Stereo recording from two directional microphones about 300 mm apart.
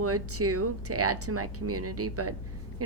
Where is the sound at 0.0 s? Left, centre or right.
Right.